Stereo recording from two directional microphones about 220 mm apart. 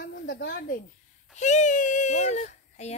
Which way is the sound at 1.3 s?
30° left (ahead or behind).